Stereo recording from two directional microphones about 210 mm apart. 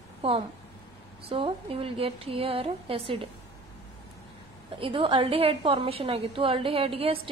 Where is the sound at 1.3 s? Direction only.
25° right (ahead or behind).